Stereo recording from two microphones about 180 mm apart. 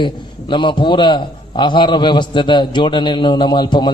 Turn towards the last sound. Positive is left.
turn(degrees=25)  # may be behind; listen again after turning